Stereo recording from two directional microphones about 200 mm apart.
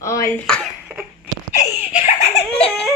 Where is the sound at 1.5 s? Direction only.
35° left (ahead or behind).